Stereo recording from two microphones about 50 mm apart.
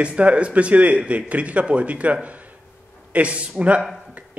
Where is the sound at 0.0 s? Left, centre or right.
Right.